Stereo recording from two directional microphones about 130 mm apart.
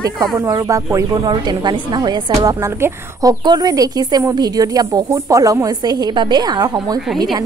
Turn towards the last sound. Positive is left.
turn(degrees=-30)  # may be behind; listen again after turning